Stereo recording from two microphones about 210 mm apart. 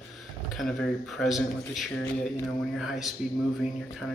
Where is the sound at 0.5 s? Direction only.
Centre (ahead or behind).